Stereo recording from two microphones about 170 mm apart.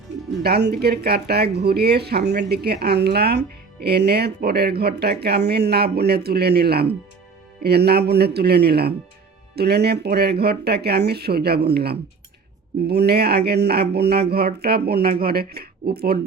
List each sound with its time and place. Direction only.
0.4 s speech: 70° right (ahead or behind)